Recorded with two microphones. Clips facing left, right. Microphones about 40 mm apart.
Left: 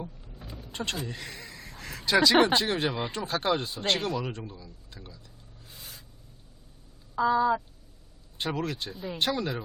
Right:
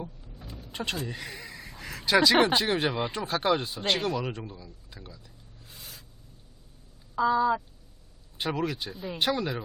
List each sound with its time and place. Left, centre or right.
0.2 s vehicle: centre
0.7 s speech: centre
5.7 s a sound: centre
7.2 s speech: centre
8.4 s speech: centre